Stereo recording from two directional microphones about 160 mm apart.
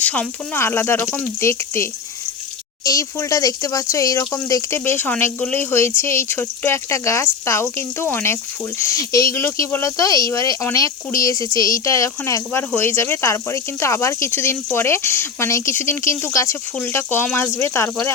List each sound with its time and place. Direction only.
0.0 s speech: 10° left (ahead or behind)